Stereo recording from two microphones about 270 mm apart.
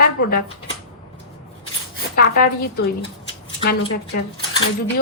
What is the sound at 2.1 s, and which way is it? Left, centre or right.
Speech, left.